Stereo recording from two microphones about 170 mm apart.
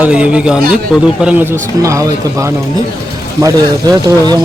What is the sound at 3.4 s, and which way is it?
Speech, 20° right (ahead or behind).